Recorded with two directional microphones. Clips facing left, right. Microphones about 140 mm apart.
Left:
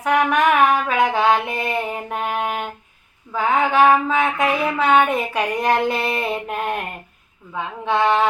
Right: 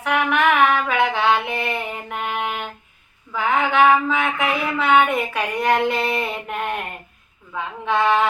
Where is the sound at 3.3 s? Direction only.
40° left (ahead or behind).